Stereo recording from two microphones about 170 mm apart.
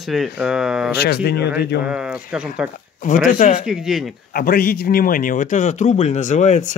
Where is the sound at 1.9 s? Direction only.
5° right (ahead or behind).